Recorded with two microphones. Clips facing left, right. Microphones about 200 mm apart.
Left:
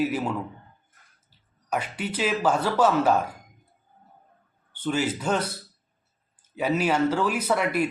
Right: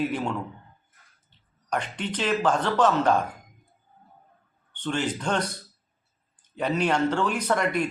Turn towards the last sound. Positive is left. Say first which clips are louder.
# left 1 dB
turn(degrees=5)  # may be behind; listen again after turning